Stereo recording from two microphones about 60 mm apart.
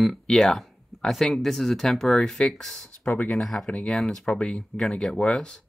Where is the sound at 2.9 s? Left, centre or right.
Left.